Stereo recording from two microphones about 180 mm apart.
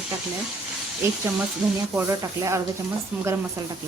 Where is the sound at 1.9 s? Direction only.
15° right (ahead or behind).